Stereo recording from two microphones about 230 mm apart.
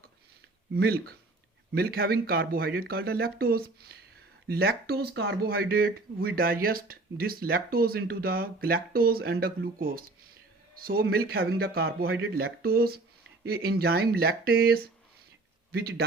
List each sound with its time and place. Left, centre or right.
0.7 s speech: right